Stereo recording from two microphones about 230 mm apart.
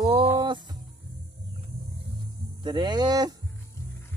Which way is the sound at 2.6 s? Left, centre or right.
Centre.